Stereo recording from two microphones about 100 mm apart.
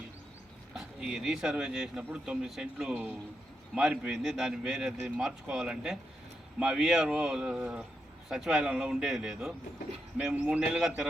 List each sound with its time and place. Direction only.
0.7 s speech: 5° right (ahead or behind)